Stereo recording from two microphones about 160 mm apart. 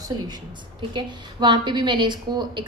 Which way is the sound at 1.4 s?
30° right (ahead or behind).